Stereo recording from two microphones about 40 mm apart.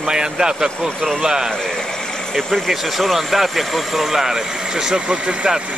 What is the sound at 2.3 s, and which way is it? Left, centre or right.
Speech, centre.